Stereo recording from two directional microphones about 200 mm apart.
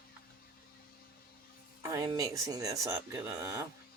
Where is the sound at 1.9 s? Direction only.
20° right (ahead or behind).